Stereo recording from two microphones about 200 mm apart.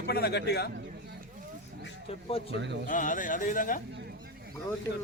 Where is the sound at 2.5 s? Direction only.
60° right (ahead or behind).